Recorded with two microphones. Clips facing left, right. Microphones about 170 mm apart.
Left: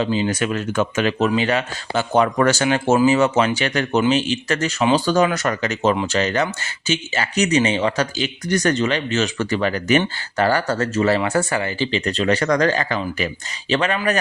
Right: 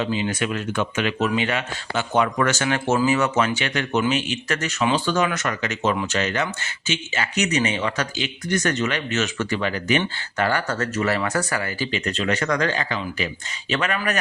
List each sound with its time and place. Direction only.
0.0 s speech: 35° left (ahead or behind)
13.7 s speech: 30° left (ahead or behind)